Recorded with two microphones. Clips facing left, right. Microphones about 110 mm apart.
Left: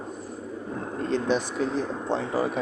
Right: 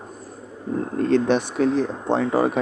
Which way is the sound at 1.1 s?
65° right (ahead or behind).